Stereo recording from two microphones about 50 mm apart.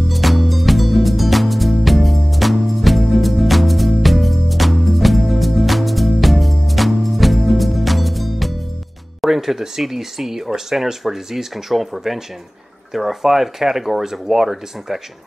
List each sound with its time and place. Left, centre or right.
0.1 s music: centre
9.2 s speech: centre